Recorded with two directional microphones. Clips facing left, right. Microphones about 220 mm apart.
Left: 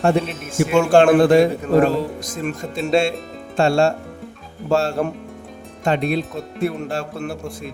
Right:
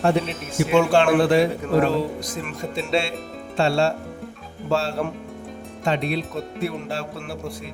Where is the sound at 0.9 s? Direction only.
45° left (ahead or behind).